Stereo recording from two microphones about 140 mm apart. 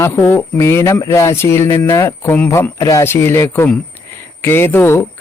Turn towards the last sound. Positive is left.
turn(degrees=15)  # may be behind; listen again after turning